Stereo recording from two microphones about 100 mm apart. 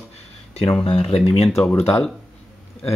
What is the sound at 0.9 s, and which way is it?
Speech, 75° left (ahead or behind).